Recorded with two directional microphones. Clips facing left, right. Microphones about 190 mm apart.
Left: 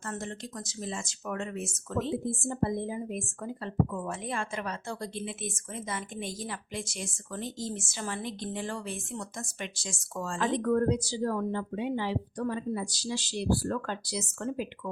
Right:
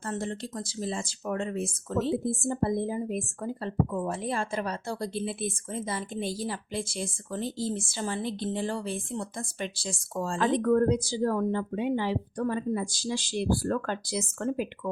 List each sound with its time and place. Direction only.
0.1 s speech: 30° right (ahead or behind)
10.4 s speech: 55° right (ahead or behind)